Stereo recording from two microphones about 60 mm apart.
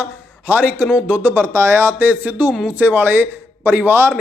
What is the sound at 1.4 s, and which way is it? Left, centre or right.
A man's voice, right.